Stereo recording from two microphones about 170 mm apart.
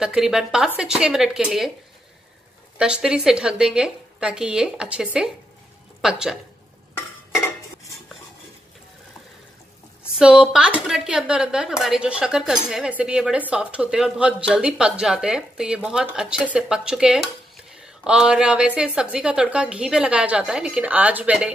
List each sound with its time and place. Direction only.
0.0 s speech: 5° right (ahead or behind)
2.8 s speech: 5° right (ahead or behind)
7.0 s cutlery: 15° left (ahead or behind)
10.1 s speech: 5° right (ahead or behind)